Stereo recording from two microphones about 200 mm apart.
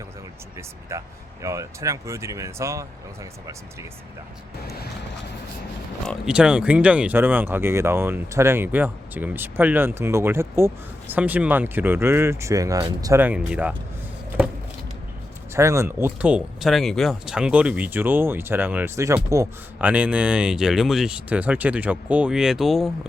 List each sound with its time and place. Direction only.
0.5 s speech: 15° right (ahead or behind)
6.1 s speech: 5° right (ahead or behind)
15.5 s speech: 15° right (ahead or behind)